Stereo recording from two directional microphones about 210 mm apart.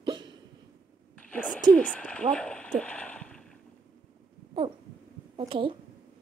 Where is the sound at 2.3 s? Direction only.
5° left (ahead or behind).